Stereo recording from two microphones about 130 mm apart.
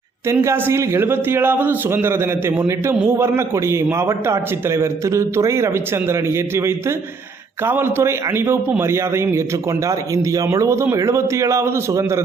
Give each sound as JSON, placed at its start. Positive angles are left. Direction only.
{"t": 0.3, "sound": "a man's voice", "side_deg": -20}